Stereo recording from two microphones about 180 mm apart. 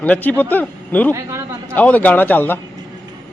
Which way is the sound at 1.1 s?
15° right (ahead or behind).